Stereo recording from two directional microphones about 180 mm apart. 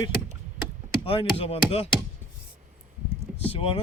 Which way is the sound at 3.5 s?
30° left (ahead or behind).